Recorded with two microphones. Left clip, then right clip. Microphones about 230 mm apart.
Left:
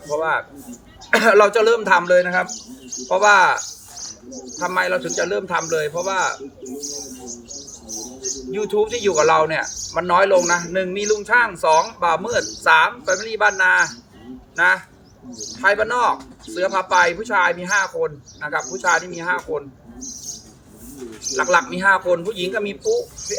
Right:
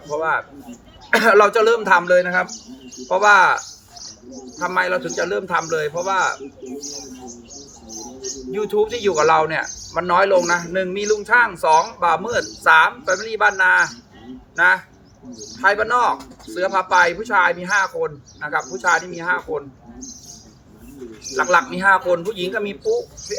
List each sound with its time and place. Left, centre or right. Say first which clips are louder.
0.1 s speech: even; centre
2.5 s speech: left 3 dB; left
3.1 s speech: right 1 dB; centre
3.6 s cricket: left 3 dB; left
4.6 s speech: even; centre
6.7 s speech: left 3 dB; left
8.4 s speech: right 1 dB; centre
15.3 s speech: left 3 dB; left
15.5 s speech: right 1 dB; centre
21.3 s speech: right 1 dB; centre